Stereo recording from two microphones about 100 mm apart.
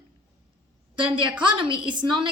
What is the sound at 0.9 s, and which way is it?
Speech, 55° right (ahead or behind).